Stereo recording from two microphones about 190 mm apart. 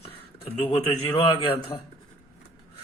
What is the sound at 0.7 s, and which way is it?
A man's voice, 30° left (ahead or behind).